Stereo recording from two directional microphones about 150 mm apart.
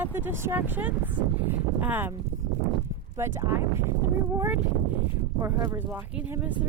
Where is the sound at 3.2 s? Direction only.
15° right (ahead or behind).